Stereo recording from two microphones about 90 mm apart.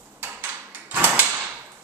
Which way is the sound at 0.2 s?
20° right (ahead or behind).